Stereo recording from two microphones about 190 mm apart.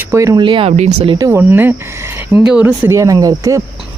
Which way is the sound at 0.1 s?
15° right (ahead or behind).